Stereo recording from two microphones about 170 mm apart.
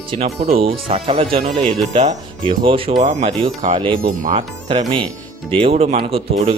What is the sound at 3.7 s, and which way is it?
Speech, 30° right (ahead or behind).